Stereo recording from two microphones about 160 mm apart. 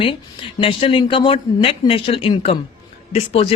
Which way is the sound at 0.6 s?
35° left (ahead or behind).